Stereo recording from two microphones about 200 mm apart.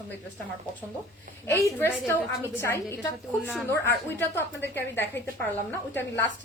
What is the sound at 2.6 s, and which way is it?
A woman's voice, 10° left (ahead or behind).